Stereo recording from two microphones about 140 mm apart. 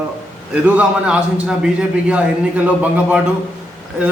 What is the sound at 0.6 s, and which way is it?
A man's voice, 10° right (ahead or behind).